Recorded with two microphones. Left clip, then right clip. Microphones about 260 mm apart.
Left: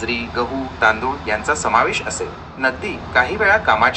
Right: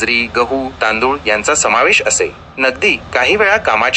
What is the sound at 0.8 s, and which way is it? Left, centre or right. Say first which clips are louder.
Speech: right 2 dB; right.